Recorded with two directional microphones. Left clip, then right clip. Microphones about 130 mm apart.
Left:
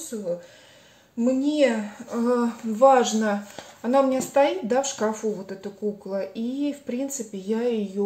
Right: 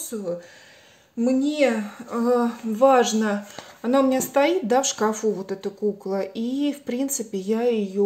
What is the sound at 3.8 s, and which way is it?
Speech, 50° right (ahead or behind).